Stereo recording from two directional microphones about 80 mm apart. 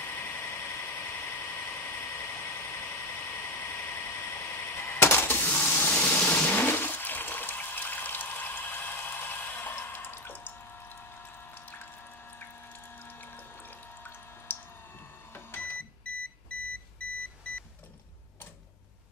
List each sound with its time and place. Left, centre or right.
0.0 s vehicle: left
5.9 s toilet flush: centre
14.5 s squish: left
15.3 s microwave oven: left